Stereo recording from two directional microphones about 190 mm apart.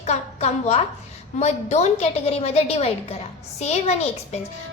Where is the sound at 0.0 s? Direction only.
35° left (ahead or behind).